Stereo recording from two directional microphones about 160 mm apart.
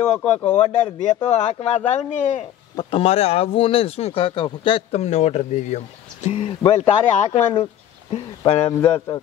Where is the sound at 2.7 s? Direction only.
30° left (ahead or behind).